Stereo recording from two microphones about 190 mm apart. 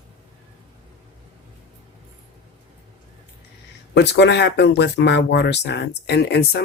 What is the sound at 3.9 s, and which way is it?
Speech, 65° left (ahead or behind).